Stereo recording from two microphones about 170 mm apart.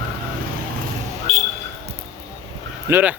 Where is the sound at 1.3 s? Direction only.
40° right (ahead or behind).